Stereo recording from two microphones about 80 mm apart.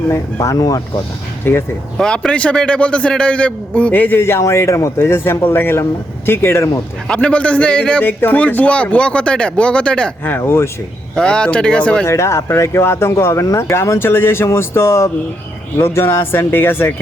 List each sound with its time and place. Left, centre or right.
0.3 s speech: left
1.5 s a man's voice: left
2.0 s speech: centre
4.2 s a man's voice: left
7.1 s speech: centre
10.3 s speech: left
11.1 s speech: centre
12.0 s speech: left